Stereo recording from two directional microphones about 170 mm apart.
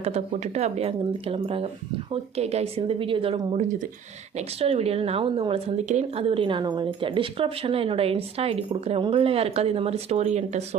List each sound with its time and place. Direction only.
0.0 s speech: 40° right (ahead or behind)